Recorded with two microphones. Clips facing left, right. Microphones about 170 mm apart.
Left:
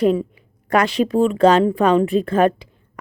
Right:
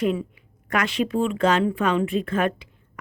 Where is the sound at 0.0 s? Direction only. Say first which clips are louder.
Left 7 dB; 35° left (ahead or behind).